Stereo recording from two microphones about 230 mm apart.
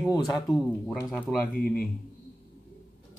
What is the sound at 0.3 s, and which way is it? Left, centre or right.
Speech, centre.